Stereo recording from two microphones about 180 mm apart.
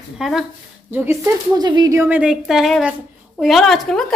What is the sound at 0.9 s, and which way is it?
Speech, 15° right (ahead or behind).